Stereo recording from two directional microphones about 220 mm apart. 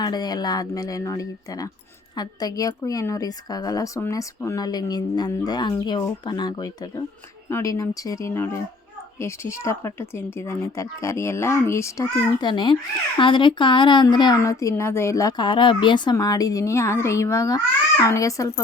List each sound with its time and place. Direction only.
0.0 s speech: 20° left (ahead or behind)